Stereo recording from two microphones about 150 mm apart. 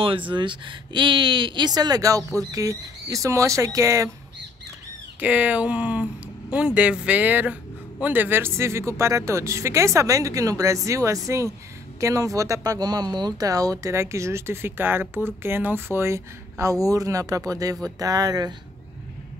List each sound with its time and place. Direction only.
0.3 s speech: 30° right (ahead or behind)
5.2 s speech: 10° right (ahead or behind); by 18.5 s 25° right (ahead or behind)